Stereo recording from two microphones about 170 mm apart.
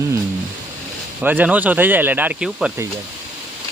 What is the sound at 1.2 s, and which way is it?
Speech, 10° right (ahead or behind).